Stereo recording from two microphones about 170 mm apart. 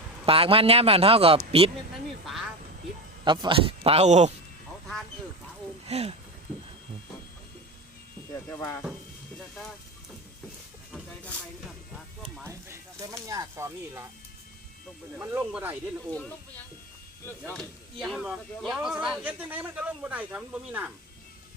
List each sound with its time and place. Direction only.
0.3 s a man's voice: 35° right (ahead or behind)
3.2 s a man's voice: 25° right (ahead or behind)
5.8 s speech: 40° right (ahead or behind)
6.5 s a sound: 10° right (ahead or behind)
8.3 s speech: 15° left (ahead or behind)
10.9 s a sound: 10° left (ahead or behind)
12.4 s a sound: 15° right (ahead or behind)
13.2 s speech: 20° right (ahead or behind)
15.2 s speech: 10° right (ahead or behind)
17.5 s speech: centre (ahead or behind)